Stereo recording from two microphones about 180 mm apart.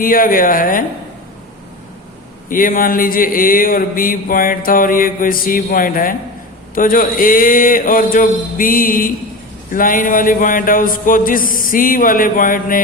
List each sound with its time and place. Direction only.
0.0 s speech: 50° left (ahead or behind)
2.5 s speech: 50° left (ahead or behind)